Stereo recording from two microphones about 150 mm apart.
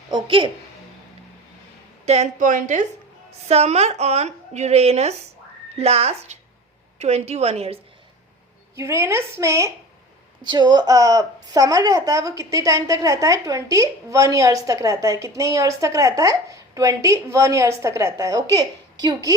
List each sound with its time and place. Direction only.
0.1 s a woman's voice: 35° right (ahead or behind)
2.0 s a woman's voice: 50° right (ahead or behind)
3.5 s speech: 45° right (ahead or behind)
8.7 s a woman's voice: 15° right (ahead or behind)
10.4 s a woman's voice: 30° right (ahead or behind)